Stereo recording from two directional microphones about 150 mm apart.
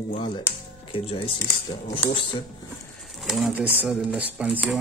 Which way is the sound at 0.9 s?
40° left (ahead or behind).